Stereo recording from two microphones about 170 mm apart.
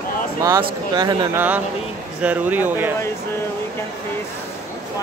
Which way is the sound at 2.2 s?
10° right (ahead or behind).